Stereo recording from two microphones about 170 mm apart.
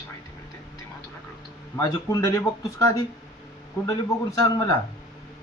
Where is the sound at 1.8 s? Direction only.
20° left (ahead or behind).